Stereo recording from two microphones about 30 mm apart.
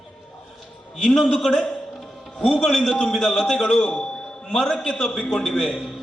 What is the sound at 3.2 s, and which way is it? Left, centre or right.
A man's voice, centre.